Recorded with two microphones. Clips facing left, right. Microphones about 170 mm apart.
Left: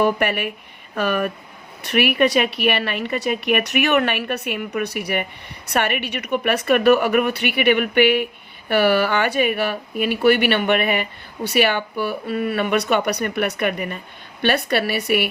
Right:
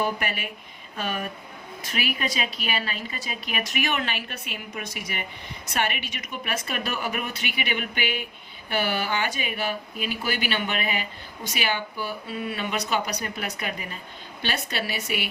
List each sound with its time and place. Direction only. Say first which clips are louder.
0.0 s a woman's voice: left 9 dB; 65° left (ahead or behind)